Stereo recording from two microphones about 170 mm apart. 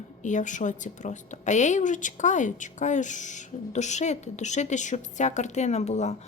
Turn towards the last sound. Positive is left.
turn(degrees=40)  # may be behind; listen again after turning